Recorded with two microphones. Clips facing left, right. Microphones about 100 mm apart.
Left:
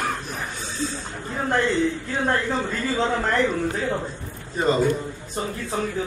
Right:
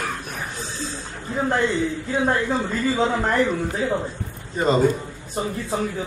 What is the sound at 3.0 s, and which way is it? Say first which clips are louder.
Speech: even; 10° right (ahead or behind).